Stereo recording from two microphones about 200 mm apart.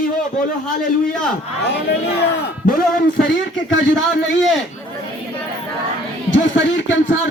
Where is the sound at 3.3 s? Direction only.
70° left (ahead or behind).